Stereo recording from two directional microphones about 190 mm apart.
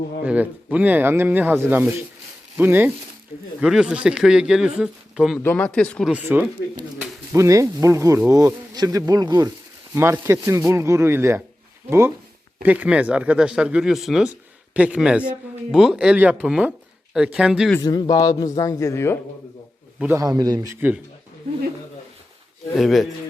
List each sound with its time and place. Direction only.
0.3 s speech: 10° right (ahead or behind)
5.4 s speech: 10° left (ahead or behind)
6.1 s speech: 10° right (ahead or behind)
18.1 s a man's voice: 20° left (ahead or behind)
20.0 s speech: 15° right (ahead or behind)
22.8 s speech: centre (ahead or behind)